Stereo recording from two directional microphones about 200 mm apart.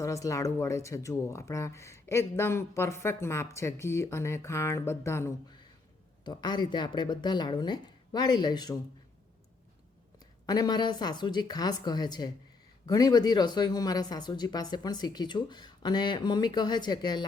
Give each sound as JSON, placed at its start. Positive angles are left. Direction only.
{"t": 0.0, "sound": "speech", "side_deg": 15}
{"t": 10.4, "sound": "speech", "side_deg": 20}